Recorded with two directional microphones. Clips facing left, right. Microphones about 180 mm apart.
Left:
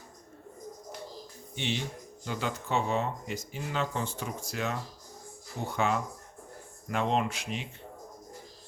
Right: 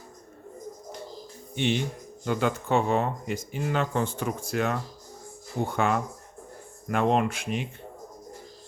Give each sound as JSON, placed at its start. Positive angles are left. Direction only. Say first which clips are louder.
{"t": 1.5, "sound": "speech", "louder": "right 7 dB", "side_deg": -55}